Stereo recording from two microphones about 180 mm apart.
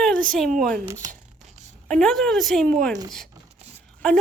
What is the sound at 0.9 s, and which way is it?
Speech, 15° right (ahead or behind).